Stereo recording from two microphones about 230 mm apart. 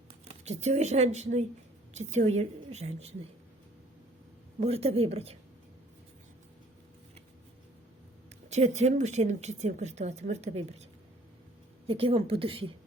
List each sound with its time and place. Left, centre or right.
0.1 s speech: right
4.6 s speech: right
8.4 s speech: right
11.9 s speech: right